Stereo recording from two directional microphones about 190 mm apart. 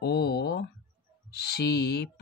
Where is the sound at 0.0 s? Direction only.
60° left (ahead or behind).